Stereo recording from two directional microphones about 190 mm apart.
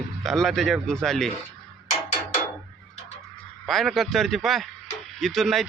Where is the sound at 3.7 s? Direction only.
Centre (ahead or behind).